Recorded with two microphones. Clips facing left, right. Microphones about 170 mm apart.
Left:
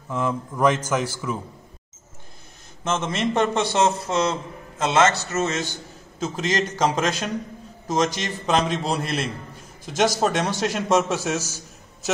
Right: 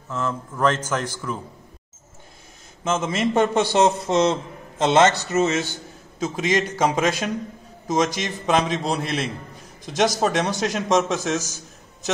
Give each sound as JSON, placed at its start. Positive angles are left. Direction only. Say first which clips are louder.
{"t": 0.1, "sound": "a man's voice", "louder": "left 2 dB", "side_deg": 10}
{"t": 2.8, "sound": "a man's voice", "louder": "right 2 dB", "side_deg": -5}
{"t": 4.3, "sound": "a man's voice", "louder": "right 3 dB", "side_deg": -25}
{"t": 5.3, "sound": "a man's voice", "louder": "right 4 dB", "side_deg": -10}